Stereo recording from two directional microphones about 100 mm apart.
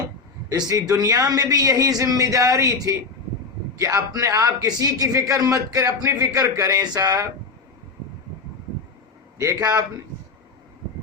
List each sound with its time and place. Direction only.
0.5 s a man's voice: 40° right (ahead or behind)
9.4 s a man's voice: 35° right (ahead or behind)